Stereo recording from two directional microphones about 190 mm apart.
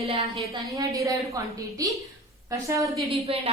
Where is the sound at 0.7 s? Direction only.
15° right (ahead or behind).